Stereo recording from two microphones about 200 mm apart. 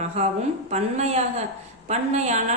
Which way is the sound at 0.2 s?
30° right (ahead or behind).